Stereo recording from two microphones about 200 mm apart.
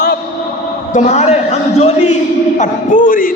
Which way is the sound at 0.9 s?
35° left (ahead or behind).